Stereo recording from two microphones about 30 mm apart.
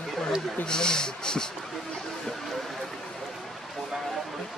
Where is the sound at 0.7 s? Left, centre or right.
Left.